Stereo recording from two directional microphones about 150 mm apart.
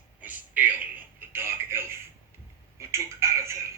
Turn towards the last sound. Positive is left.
turn(degrees=-20)  # may be behind; listen again after turning